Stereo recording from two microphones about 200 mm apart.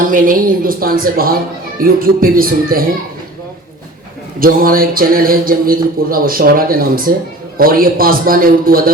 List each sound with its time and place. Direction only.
0.0 s speech: 40° right (ahead or behind)
4.4 s speech: 45° right (ahead or behind)